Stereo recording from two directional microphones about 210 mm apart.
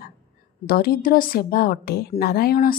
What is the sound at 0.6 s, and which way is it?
Speech, 45° left (ahead or behind).